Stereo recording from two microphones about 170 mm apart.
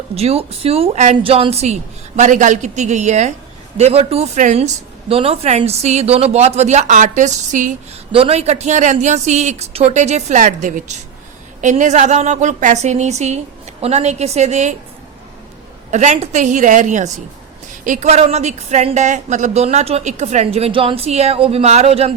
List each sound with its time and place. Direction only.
0.1 s a woman's voice: 35° right (ahead or behind)
8.1 s a woman's voice: 35° right (ahead or behind)
15.9 s a woman's voice: 45° right (ahead or behind)